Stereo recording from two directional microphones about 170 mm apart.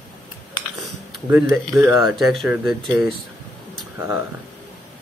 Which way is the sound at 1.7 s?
15° right (ahead or behind).